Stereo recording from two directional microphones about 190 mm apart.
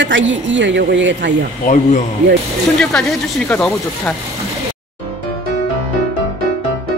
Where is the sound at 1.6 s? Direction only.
40° left (ahead or behind).